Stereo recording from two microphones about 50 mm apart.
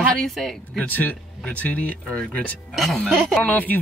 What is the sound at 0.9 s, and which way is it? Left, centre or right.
Speech, left.